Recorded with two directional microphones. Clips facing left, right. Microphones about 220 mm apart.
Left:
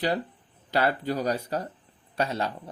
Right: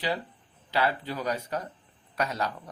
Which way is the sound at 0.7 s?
45° left (ahead or behind).